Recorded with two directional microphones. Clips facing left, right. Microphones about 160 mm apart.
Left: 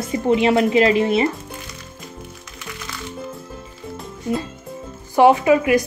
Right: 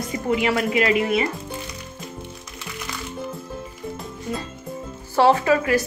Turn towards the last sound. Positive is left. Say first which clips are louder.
# left 3 dB
turn(degrees=15)  # may be behind; listen again after turning